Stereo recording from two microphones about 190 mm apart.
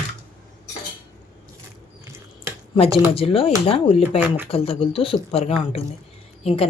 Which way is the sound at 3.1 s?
30° left (ahead or behind).